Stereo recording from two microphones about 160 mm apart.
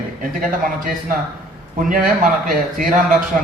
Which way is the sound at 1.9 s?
55° right (ahead or behind).